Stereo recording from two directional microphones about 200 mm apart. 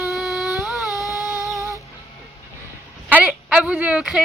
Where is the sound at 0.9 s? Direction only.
15° left (ahead or behind).